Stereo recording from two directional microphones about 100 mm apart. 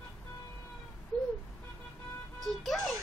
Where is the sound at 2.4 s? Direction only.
Centre (ahead or behind).